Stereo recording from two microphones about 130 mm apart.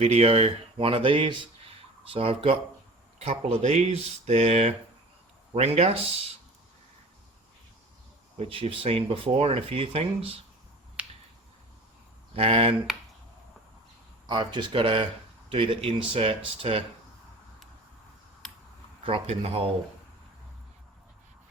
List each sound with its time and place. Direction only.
0.0 s speech: 55° right (ahead or behind)
8.4 s speech: 45° right (ahead or behind)
11.0 s finger snapping: 10° right (ahead or behind)
12.3 s speech: 45° right (ahead or behind)
14.3 s speech: 35° right (ahead or behind)
19.0 s speech: 50° right (ahead or behind)